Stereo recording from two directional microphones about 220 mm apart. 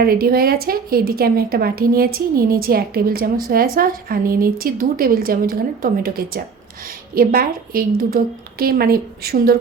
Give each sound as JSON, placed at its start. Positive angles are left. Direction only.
{"t": 0.0, "sound": "a woman's voice", "side_deg": -45}